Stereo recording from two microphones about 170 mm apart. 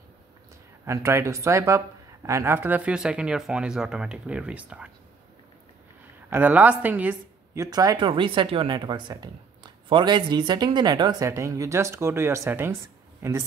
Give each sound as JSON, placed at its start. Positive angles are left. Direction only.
{"t": 0.8, "sound": "speech", "side_deg": -15}
{"t": 6.3, "sound": "speech", "side_deg": -10}